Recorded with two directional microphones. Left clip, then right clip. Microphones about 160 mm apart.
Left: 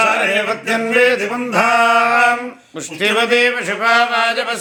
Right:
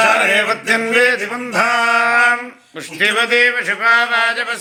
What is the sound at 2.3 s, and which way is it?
Speech, 15° left (ahead or behind).